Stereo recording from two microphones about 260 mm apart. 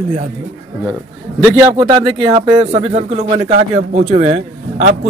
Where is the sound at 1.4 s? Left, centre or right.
Centre.